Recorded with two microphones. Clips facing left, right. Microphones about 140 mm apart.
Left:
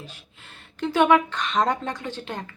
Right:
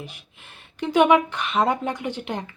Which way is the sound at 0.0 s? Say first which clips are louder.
Right 3 dB; 15° right (ahead or behind).